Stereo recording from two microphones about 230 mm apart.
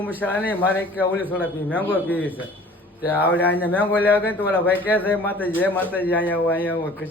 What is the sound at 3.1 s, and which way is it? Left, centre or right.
Speech, centre.